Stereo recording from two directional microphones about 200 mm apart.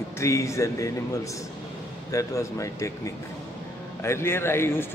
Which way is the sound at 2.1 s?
15° left (ahead or behind).